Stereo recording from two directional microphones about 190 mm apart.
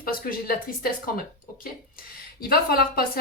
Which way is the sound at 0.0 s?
50° left (ahead or behind).